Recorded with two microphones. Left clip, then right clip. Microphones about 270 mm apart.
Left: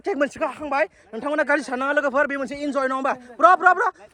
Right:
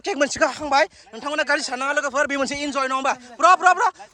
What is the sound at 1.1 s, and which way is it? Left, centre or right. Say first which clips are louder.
A man's voice: left 1 dB; centre.